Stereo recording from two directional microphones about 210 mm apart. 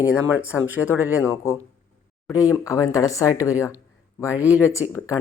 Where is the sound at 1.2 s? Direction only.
15° left (ahead or behind).